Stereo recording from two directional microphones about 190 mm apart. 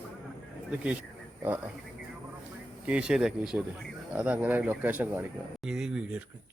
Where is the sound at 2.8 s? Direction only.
5° right (ahead or behind).